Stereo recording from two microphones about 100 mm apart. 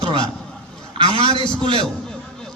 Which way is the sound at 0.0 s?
60° right (ahead or behind).